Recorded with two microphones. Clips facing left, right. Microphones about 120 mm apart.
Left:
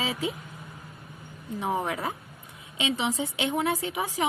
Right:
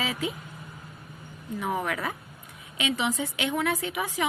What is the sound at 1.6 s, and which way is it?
A woman's voice, 30° left (ahead or behind).